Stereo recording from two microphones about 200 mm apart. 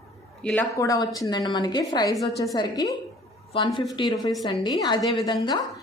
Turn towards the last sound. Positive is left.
turn(degrees=20)  # may be behind; listen again after turning